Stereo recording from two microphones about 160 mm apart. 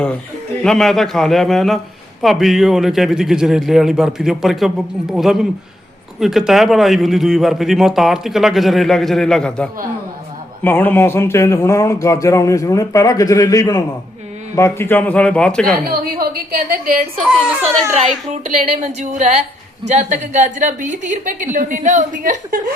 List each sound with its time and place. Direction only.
0.6 s speech: 5° left (ahead or behind)
15.9 s a woman's voice: 70° right (ahead or behind)
18.3 s a woman's voice: 45° right (ahead or behind)